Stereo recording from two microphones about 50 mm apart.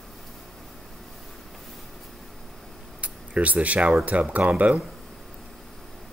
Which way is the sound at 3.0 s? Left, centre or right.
Right.